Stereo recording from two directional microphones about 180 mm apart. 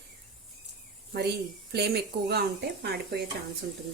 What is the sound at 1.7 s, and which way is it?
Speech, 65° right (ahead or behind).